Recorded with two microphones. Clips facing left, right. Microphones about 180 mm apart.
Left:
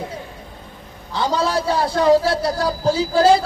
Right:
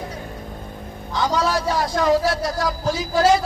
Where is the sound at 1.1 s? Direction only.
30° left (ahead or behind).